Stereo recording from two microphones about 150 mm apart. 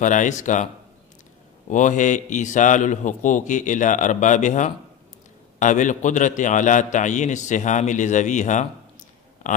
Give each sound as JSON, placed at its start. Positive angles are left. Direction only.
{"t": 0.0, "sound": "a man's voice", "side_deg": 55}
{"t": 1.7, "sound": "a man's voice", "side_deg": 55}